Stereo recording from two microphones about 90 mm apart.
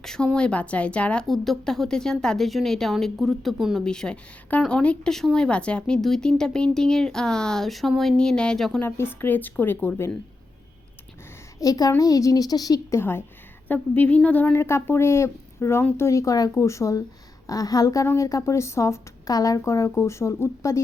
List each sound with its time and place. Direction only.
0.0 s a woman's voice: 5° left (ahead or behind)
8.8 s speech: 25° left (ahead or behind)
11.6 s a woman's voice: 45° left (ahead or behind)
13.0 s speech: 25° left (ahead or behind)
14.5 s a woman's voice: 30° left (ahead or behind)